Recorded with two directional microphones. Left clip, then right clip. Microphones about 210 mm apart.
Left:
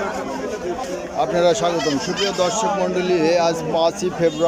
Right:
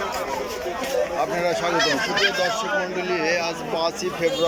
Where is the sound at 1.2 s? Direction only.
15° left (ahead or behind).